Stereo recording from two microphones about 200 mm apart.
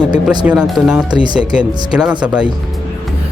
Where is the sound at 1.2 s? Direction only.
20° right (ahead or behind).